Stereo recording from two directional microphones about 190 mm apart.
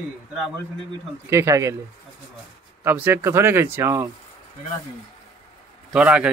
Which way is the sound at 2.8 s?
10° right (ahead or behind).